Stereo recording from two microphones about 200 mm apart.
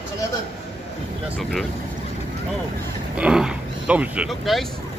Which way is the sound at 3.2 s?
5° right (ahead or behind).